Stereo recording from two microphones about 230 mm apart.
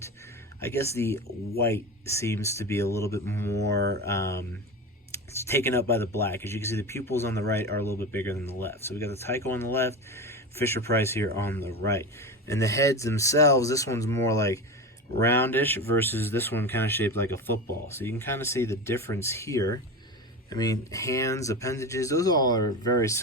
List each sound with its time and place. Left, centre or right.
0.6 s speech: centre
3.8 s mantra: right
4.0 s speech: centre